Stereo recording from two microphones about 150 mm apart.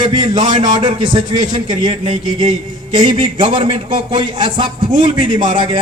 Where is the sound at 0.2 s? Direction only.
30° right (ahead or behind).